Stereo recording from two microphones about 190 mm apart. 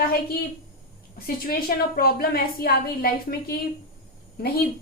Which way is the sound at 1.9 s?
50° left (ahead or behind).